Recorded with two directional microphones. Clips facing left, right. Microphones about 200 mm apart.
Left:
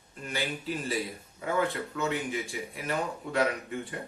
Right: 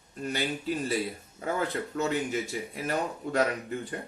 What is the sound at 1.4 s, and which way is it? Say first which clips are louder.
Speech: left 1 dB; 40° right (ahead or behind).